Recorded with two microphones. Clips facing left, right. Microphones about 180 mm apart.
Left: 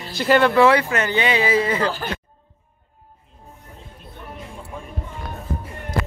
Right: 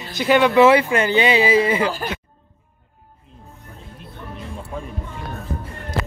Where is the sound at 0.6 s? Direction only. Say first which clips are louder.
Right 3 dB; 25° right (ahead or behind).